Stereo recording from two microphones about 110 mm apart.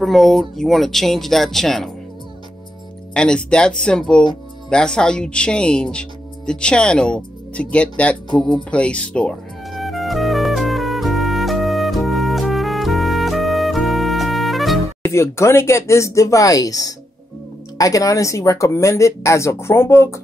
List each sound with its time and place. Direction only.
0.0 s speech: centre (ahead or behind)
3.2 s speech: 10° left (ahead or behind)
9.7 s music: centre (ahead or behind)
15.0 s speech: 25° left (ahead or behind)